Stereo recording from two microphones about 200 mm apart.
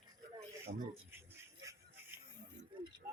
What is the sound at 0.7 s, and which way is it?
Speech, 45° right (ahead or behind).